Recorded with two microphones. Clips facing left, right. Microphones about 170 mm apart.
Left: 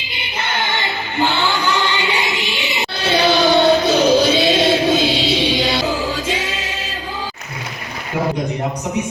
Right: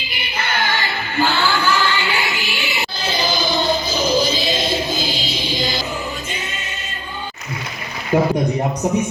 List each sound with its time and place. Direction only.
0.1 s music: 20° left (ahead or behind)
3.0 s choir: 70° left (ahead or behind); by 6.7 s 90° left